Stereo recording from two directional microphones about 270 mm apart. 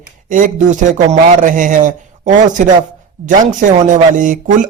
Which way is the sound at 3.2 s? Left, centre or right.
Right.